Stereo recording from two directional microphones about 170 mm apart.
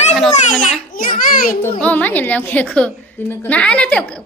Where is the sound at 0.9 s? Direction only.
55° left (ahead or behind).